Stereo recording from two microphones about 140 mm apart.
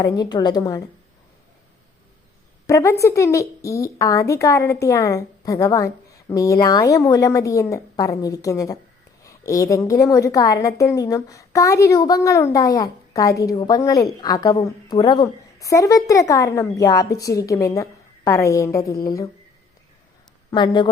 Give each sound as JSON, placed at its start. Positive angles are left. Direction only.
{"t": 0.0, "sound": "speech", "side_deg": 30}
{"t": 2.6, "sound": "speech", "side_deg": 20}
{"t": 20.5, "sound": "speech", "side_deg": 30}